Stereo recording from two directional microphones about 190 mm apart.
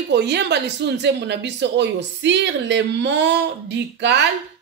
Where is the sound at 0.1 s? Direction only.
60° right (ahead or behind).